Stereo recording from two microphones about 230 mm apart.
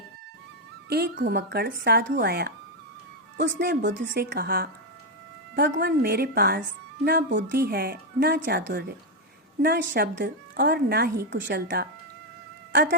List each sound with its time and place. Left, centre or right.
0.9 s speech: right
5.7 s a woman's voice: right